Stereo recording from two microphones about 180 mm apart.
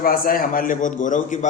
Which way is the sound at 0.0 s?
55° left (ahead or behind).